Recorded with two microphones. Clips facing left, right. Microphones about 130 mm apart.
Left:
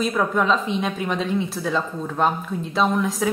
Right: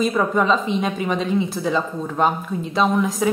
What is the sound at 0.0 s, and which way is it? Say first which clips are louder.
A woman's voice: right 2 dB; centre (ahead or behind).